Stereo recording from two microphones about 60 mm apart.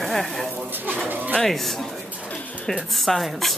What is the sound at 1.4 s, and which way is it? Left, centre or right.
Speech, centre.